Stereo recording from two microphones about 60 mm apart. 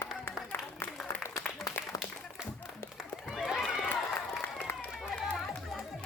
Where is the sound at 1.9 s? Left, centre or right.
Left.